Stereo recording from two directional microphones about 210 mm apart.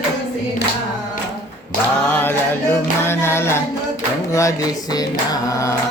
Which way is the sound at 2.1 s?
10° left (ahead or behind).